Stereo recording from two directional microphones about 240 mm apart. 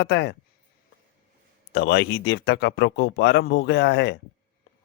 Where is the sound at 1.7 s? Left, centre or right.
Left.